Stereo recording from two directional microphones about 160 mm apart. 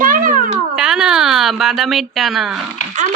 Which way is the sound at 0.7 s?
5° right (ahead or behind).